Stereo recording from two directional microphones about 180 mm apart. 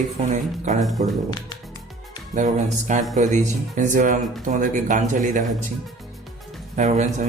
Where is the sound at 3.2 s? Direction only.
45° right (ahead or behind).